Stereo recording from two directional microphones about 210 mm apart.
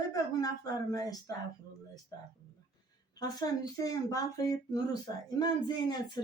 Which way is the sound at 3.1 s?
20° left (ahead or behind).